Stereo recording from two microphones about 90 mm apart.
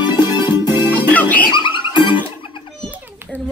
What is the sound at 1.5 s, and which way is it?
Music, 65° left (ahead or behind).